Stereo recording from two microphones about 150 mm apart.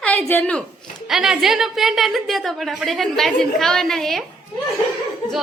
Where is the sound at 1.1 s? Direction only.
Centre (ahead or behind).